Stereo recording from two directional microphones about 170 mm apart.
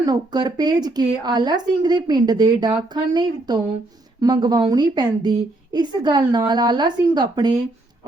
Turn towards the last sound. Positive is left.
turn(degrees=-25)  # may be behind; listen again after turning